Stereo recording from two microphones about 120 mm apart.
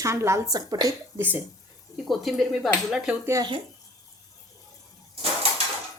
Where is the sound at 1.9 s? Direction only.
Centre (ahead or behind).